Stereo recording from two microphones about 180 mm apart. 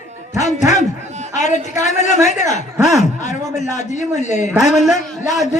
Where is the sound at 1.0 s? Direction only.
40° right (ahead or behind).